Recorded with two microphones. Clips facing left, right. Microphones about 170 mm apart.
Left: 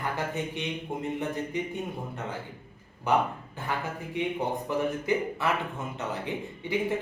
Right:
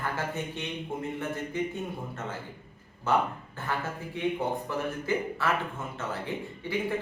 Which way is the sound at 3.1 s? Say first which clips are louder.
Left 1 dB; 15° left (ahead or behind).